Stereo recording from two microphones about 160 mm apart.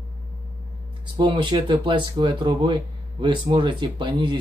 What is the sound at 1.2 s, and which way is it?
Speech, 30° right (ahead or behind).